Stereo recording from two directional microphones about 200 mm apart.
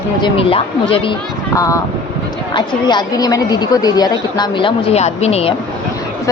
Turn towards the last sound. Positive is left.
turn(degrees=30)  # may be behind; listen again after turning